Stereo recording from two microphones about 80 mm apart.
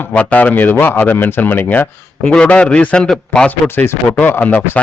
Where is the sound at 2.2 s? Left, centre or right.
Centre.